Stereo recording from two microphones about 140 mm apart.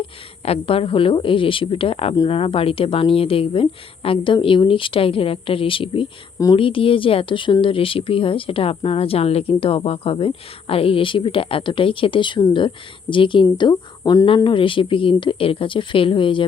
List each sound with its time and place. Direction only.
0.4 s speech: 45° left (ahead or behind)